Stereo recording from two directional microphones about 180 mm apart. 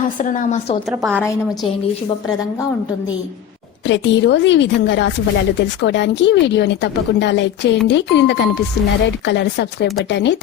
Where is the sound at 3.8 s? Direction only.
85° left.